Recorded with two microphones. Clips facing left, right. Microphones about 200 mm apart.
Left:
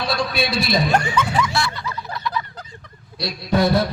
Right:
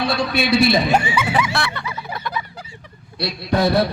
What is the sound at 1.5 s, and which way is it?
Music, 60° right (ahead or behind).